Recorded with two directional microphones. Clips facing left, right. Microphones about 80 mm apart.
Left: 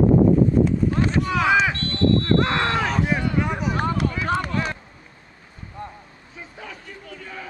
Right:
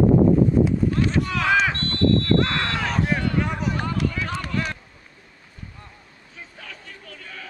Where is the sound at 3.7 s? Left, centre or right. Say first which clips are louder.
Left 2 dB; left.